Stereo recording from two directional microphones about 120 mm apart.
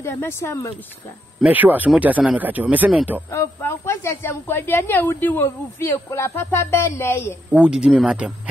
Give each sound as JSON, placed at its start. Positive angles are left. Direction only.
{"t": 0.0, "sound": "speech", "side_deg": 20}
{"t": 1.4, "sound": "speech", "side_deg": -15}
{"t": 3.3, "sound": "speech", "side_deg": 20}
{"t": 7.5, "sound": "speech", "side_deg": -10}